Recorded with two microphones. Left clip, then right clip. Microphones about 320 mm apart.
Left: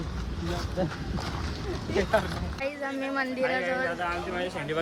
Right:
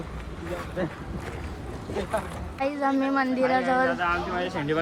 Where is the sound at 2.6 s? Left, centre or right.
Centre.